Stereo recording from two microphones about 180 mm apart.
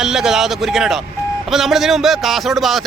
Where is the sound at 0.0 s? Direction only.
5° right (ahead or behind).